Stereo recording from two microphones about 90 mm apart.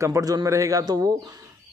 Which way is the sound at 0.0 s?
40° right (ahead or behind).